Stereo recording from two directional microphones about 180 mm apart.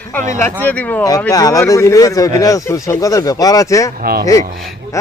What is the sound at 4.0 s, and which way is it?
Speech, 55° right (ahead or behind).